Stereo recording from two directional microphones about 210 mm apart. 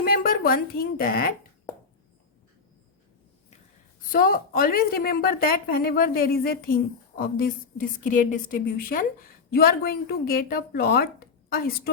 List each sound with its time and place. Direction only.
0.0 s a woman's voice: 45° left (ahead or behind)
4.1 s a woman's voice: 40° left (ahead or behind)